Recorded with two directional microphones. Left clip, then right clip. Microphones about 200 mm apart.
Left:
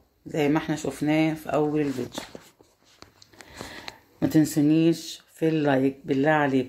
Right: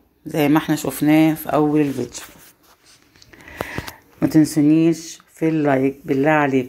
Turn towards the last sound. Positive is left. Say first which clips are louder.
# right 5 dB
turn(degrees=-5)  # may be behind; listen again after turning